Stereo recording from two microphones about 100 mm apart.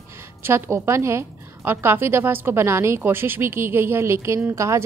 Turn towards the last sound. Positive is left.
turn(degrees=-30)  # may be behind; listen again after turning